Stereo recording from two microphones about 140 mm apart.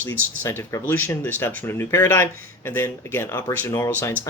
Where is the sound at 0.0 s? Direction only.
15° left (ahead or behind).